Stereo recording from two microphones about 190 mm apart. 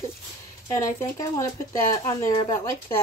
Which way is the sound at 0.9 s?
20° left (ahead or behind).